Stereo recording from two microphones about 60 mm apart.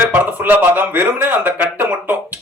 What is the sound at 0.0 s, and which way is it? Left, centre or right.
A man's voice, right.